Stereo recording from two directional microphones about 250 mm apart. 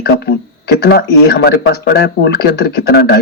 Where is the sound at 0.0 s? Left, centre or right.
Left.